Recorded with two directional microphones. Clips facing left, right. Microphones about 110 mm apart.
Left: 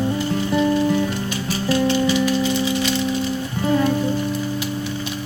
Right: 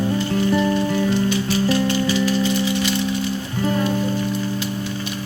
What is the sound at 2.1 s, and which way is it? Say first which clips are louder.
Music: left 1 dB; 15° left (ahead or behind).